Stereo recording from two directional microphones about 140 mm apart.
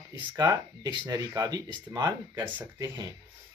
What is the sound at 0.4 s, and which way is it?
Speech, 30° right (ahead or behind).